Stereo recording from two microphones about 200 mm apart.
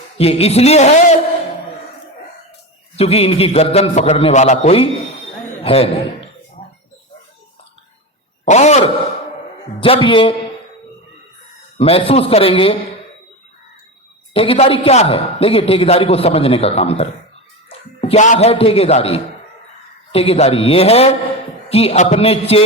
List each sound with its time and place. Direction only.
0.2 s a man's voice: 30° left (ahead or behind)
2.9 s a man's voice: 30° left (ahead or behind)
8.4 s a man's voice: 35° left (ahead or behind)
9.8 s a man's voice: 25° left (ahead or behind)
11.8 s a man's voice: 30° left (ahead or behind)
14.3 s a man's voice: 30° left (ahead or behind)